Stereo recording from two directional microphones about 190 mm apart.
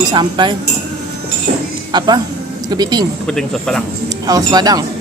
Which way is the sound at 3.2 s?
5° left (ahead or behind).